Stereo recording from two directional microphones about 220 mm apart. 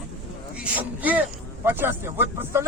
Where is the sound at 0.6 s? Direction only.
5° right (ahead or behind).